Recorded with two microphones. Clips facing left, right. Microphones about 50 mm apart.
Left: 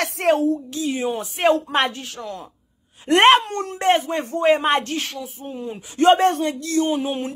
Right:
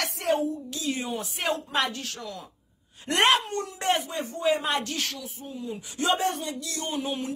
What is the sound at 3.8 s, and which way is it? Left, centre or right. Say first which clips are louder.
Speech: left 9 dB; left.